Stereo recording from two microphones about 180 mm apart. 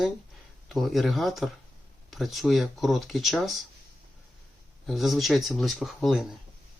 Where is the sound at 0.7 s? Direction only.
Centre (ahead or behind).